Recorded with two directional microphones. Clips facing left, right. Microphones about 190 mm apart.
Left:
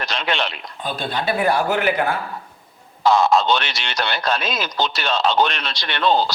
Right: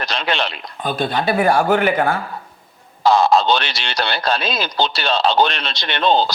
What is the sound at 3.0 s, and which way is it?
Speech, 35° right (ahead or behind).